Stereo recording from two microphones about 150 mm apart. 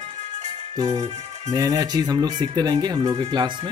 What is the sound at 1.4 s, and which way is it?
Speech, 25° right (ahead or behind).